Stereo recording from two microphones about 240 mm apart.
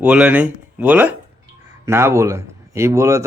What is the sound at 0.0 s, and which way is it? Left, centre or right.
A man's voice, centre.